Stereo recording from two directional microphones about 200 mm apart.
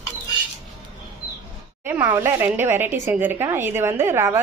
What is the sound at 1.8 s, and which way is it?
A woman's voice, 10° right (ahead or behind).